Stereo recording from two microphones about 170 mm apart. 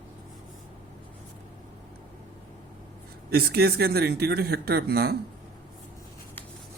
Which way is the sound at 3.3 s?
65° right (ahead or behind).